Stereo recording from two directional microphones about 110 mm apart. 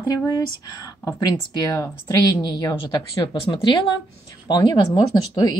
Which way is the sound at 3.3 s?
50° left (ahead or behind).